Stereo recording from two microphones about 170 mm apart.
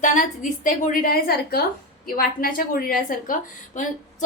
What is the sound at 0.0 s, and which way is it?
A woman's voice, 50° left (ahead or behind).